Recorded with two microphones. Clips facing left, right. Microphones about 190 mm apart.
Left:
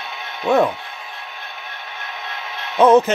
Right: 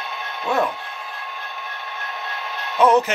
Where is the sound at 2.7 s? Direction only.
25° left (ahead or behind).